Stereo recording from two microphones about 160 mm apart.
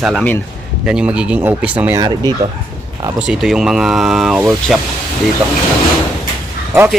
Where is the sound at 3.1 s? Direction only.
5° right (ahead or behind).